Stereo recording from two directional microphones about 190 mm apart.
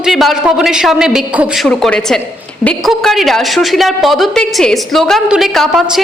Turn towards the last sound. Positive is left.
turn(degrees=0)  # may be behind; listen again after turning